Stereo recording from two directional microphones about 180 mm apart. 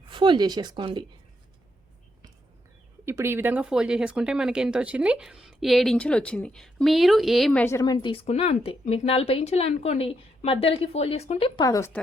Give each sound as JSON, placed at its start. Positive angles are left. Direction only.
{"t": 0.1, "sound": "speech", "side_deg": -25}
{"t": 3.1, "sound": "speech", "side_deg": -15}